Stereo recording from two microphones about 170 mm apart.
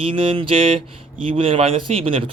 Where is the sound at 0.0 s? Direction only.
30° right (ahead or behind).